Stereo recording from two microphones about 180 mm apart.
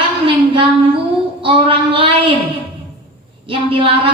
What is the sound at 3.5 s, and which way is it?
Speech, 30° right (ahead or behind).